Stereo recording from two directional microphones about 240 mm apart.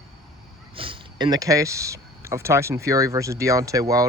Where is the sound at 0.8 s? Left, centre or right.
Centre.